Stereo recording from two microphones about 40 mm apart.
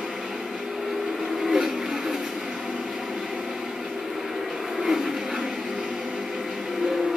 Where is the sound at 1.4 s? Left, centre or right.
Centre.